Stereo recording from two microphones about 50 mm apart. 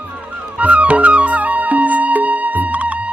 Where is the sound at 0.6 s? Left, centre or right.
Right.